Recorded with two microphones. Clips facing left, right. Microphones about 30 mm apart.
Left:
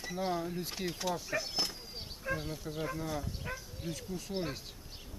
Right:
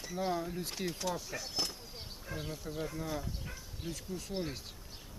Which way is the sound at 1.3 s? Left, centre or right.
Centre.